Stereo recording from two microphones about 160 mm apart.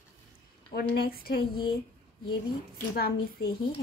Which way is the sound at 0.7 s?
70° left (ahead or behind).